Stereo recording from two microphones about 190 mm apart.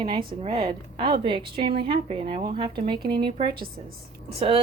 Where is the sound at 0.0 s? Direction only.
25° right (ahead or behind).